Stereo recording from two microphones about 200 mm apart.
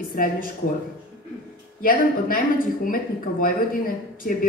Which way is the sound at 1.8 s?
45° left (ahead or behind).